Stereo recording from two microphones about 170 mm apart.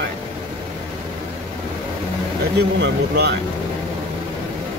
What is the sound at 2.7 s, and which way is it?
Speech, 85° right.